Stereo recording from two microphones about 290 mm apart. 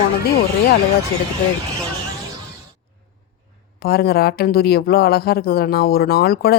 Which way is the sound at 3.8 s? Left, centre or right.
Left.